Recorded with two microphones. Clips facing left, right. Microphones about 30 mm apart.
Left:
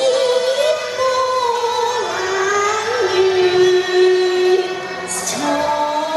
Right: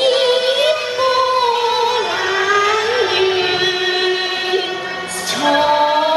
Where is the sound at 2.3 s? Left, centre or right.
Right.